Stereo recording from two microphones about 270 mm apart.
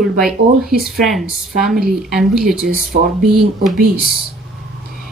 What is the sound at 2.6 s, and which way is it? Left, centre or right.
A woman's voice, right.